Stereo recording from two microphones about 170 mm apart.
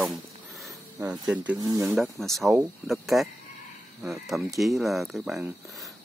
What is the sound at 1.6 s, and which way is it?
Speech, 20° right (ahead or behind).